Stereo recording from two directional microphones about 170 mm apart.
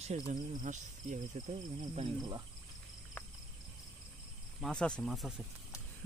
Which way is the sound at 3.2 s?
10° left (ahead or behind).